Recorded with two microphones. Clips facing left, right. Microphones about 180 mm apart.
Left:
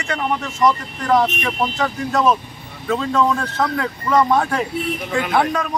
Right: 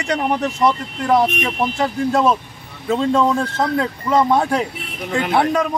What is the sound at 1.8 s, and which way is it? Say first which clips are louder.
Speech: right 4 dB; 30° right (ahead or behind).